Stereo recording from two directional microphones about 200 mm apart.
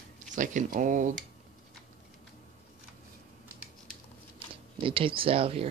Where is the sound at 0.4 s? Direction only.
40° right (ahead or behind).